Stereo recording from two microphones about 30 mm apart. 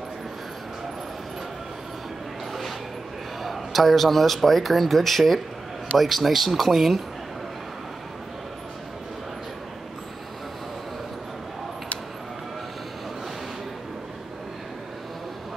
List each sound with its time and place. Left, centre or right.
3.4 s speech: centre